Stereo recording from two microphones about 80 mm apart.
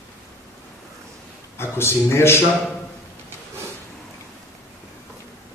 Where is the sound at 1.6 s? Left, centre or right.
Left.